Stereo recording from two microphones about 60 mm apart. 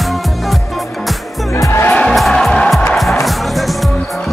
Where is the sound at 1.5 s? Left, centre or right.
Left.